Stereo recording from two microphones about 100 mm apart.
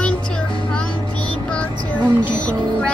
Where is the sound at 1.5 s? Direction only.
15° left (ahead or behind).